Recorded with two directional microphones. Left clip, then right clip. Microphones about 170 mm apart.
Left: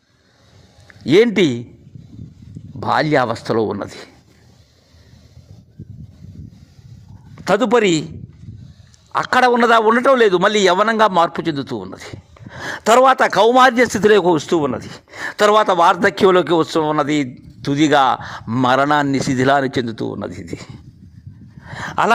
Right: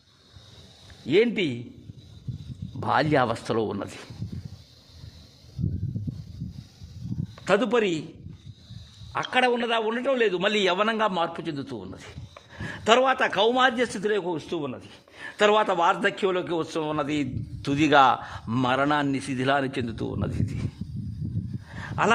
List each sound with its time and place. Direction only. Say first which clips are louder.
1.0 s a man's voice: left 9 dB; 40° left (ahead or behind)
2.8 s speech: left 7 dB; 15° left (ahead or behind)
7.4 s a man's voice: left 8 dB; 40° left (ahead or behind)
9.3 s a man's voice: left 11 dB; 45° left (ahead or behind)
10.5 s a man's voice: left 9 dB; 25° left (ahead or behind)
18.6 s a man's voice: left 9 dB; 35° left (ahead or behind); by 20.6 s 20° left (ahead or behind)
21.7 s a sound: left 8 dB; 35° left (ahead or behind)